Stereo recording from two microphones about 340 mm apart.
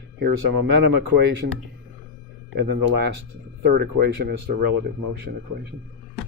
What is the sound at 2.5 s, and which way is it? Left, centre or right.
Speech, right.